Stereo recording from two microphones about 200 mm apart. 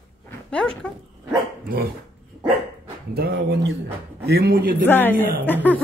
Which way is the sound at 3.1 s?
55° right (ahead or behind).